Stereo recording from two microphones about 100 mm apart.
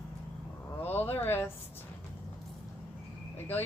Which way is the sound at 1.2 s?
20° left (ahead or behind).